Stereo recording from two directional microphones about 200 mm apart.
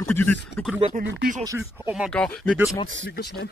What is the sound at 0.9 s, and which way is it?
Speech, 40° right (ahead or behind).